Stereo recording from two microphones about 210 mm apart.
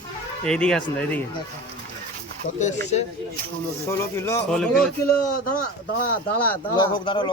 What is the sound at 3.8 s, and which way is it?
Speech, 10° left (ahead or behind).